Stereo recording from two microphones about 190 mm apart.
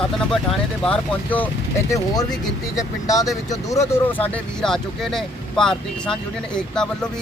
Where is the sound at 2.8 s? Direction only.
20° left (ahead or behind).